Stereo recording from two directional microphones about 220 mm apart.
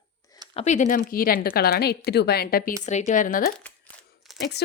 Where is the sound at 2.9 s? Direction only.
30° left (ahead or behind).